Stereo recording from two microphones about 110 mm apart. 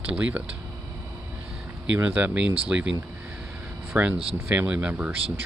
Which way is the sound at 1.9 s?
15° right (ahead or behind).